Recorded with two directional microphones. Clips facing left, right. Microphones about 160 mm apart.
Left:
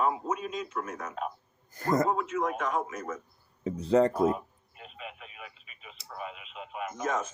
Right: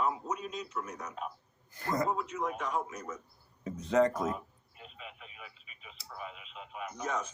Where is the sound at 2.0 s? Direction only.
90° left.